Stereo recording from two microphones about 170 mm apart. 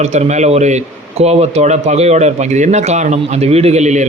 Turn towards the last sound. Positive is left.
turn(degrees=-45)  # may be behind; listen again after turning